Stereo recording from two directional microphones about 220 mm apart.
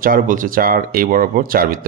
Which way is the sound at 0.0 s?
40° right (ahead or behind).